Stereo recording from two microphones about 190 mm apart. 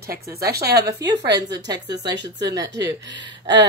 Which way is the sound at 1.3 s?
20° right (ahead or behind).